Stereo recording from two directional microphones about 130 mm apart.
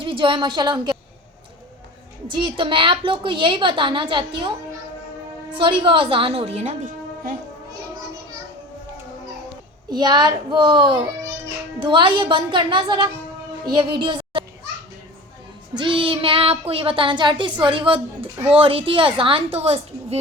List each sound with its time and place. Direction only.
0.0 s a woman's voice: 40° right (ahead or behind)
2.2 s speech: 35° right (ahead or behind)
5.5 s speech: 40° right (ahead or behind); by 6.7 s 55° right (ahead or behind)
9.9 s speech: 35° right (ahead or behind)
15.7 s a woman's voice: 40° right (ahead or behind)